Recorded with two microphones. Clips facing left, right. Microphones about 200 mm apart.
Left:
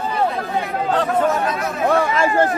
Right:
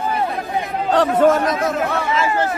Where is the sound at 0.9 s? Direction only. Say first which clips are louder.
Right 5 dB; 85° right.